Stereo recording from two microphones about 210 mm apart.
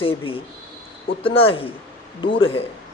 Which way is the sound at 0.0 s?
25° left (ahead or behind).